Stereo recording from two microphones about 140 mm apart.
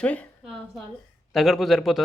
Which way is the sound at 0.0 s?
10° left (ahead or behind).